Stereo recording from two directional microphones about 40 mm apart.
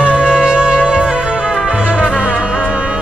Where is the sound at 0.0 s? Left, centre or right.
Right.